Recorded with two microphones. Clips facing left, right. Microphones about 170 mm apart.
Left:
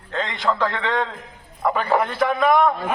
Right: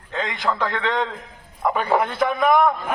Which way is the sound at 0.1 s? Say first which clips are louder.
Left 1 dB; 10° right (ahead or behind).